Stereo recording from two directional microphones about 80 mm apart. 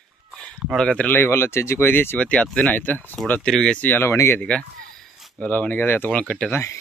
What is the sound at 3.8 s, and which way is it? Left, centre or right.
Speech, left.